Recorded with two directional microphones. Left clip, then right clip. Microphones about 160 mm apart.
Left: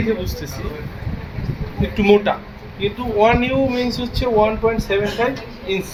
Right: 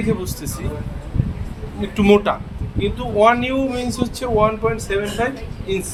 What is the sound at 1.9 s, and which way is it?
Speech, 90° right.